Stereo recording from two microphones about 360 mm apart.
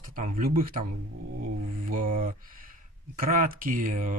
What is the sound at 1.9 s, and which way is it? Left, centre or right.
Speech, right.